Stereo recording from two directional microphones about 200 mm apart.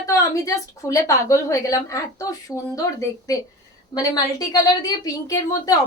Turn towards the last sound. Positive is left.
turn(degrees=15)  # may be behind; listen again after turning